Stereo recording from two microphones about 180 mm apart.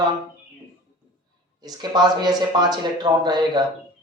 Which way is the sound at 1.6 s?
25° right (ahead or behind).